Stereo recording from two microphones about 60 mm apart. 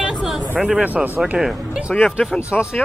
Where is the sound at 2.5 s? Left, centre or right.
Left.